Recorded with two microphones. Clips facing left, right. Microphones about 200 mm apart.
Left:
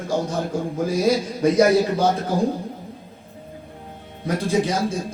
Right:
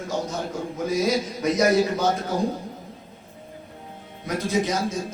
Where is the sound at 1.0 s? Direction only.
30° left (ahead or behind).